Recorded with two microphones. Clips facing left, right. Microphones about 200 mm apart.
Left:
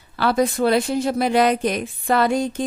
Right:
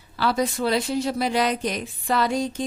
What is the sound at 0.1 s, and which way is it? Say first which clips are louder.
A woman's voice: left 4 dB; 55° left (ahead or behind).